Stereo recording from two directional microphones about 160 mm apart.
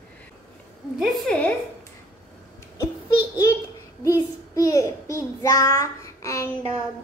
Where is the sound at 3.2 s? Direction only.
20° left (ahead or behind).